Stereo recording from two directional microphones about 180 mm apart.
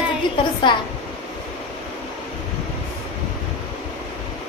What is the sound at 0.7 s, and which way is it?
Female singing, 25° left (ahead or behind).